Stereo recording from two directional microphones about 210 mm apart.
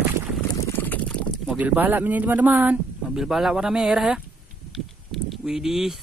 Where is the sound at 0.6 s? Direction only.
10° left (ahead or behind).